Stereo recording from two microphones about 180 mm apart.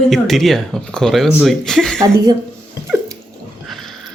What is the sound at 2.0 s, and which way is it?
Speech, 20° right (ahead or behind).